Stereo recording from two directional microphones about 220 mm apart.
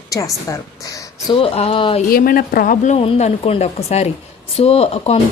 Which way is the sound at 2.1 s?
40° left (ahead or behind).